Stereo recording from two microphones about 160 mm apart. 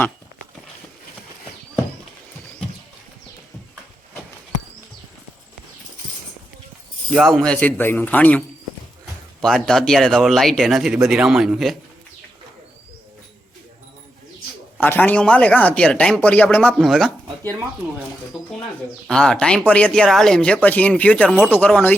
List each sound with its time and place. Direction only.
7.1 s speech: centre (ahead or behind)
14.8 s speech: 10° left (ahead or behind)
18.3 s speech: 5° right (ahead or behind)